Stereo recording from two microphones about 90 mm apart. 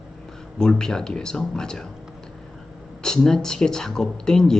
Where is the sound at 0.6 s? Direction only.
5° left (ahead or behind).